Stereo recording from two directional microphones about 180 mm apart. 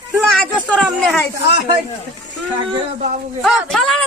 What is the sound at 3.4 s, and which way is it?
Speech, centre (ahead or behind).